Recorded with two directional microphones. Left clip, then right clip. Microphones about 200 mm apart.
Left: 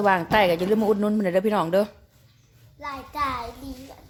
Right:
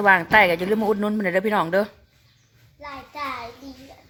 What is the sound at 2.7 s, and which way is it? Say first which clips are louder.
Child singing: left 4 dB; 50° left (ahead or behind).